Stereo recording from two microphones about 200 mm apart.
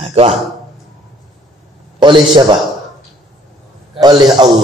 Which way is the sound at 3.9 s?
20° right (ahead or behind).